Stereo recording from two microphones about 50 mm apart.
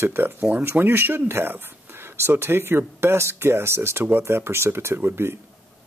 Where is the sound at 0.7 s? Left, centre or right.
Right.